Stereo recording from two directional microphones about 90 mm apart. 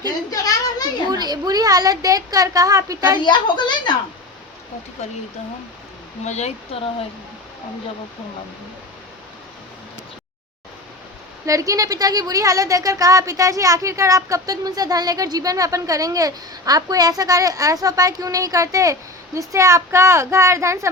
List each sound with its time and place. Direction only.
0.3 s a sound: 45° left (ahead or behind)
1.1 s a woman's voice: 50° right (ahead or behind)
3.2 s a woman's voice: 60° left (ahead or behind)
11.4 s a woman's voice: 40° right (ahead or behind)